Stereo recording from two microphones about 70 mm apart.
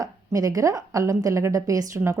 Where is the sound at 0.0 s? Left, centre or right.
Right.